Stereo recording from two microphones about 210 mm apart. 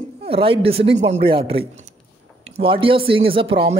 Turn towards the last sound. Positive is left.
turn(degrees=-25)  # may be behind; listen again after turning